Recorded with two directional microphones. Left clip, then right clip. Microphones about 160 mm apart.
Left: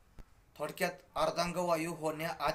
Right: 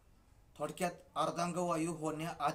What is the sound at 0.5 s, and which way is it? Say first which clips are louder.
A man's voice: left 2 dB; 20° right (ahead or behind).